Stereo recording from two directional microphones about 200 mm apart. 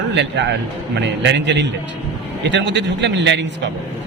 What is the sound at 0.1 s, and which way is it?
A man's voice, 60° right (ahead or behind).